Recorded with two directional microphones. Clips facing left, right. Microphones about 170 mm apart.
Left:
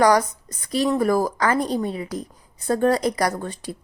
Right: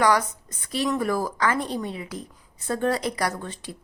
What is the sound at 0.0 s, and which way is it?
A woman's voice, 40° left (ahead or behind).